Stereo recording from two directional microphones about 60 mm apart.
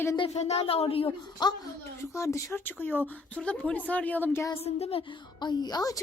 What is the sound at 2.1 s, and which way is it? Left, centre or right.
Speech, left.